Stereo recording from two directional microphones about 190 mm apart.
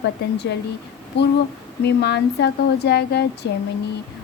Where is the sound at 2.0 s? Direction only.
65° left (ahead or behind).